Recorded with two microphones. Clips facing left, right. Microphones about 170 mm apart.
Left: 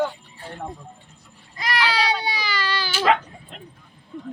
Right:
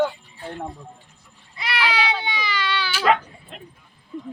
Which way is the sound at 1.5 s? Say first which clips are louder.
Left 1 dB; 40° left (ahead or behind).